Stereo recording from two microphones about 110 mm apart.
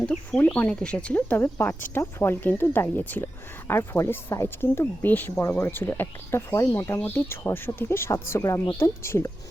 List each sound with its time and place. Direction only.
0.3 s speech: 15° left (ahead or behind)